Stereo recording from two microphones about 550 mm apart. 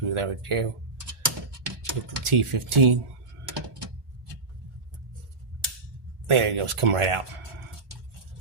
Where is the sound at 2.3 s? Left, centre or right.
Right.